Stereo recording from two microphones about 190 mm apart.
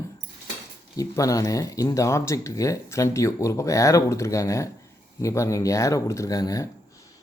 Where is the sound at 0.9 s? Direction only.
15° left (ahead or behind).